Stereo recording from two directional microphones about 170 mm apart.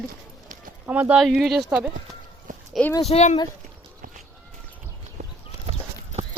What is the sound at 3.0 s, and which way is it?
Speech, 40° left (ahead or behind).